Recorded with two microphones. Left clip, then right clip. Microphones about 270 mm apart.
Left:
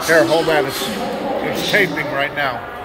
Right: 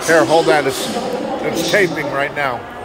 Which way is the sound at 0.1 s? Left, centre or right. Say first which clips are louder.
Right 2 dB; centre.